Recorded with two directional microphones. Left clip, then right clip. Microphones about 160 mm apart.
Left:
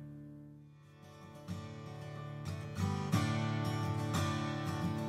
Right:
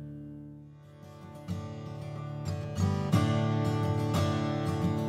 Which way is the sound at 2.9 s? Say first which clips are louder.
Right 6 dB; 25° right (ahead or behind).